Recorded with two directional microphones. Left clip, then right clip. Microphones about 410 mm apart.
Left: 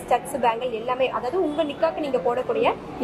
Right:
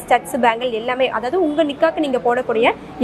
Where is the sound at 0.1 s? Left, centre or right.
Right.